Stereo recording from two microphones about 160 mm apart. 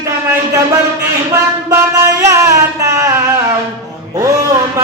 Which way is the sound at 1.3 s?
15° right (ahead or behind).